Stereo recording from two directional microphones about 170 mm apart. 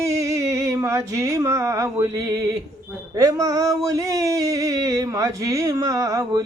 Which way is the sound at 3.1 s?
20° right (ahead or behind).